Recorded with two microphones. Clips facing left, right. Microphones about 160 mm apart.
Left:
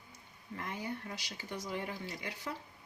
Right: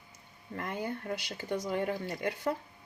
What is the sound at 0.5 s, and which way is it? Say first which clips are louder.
Speech: right 4 dB; 55° right (ahead or behind).